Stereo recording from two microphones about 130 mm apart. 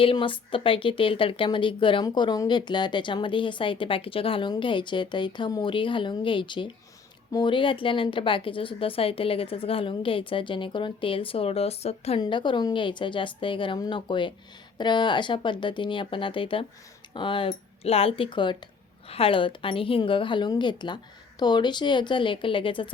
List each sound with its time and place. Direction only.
0.0 s a woman's voice: 40° left (ahead or behind)
12.2 s a woman's voice: 35° left (ahead or behind)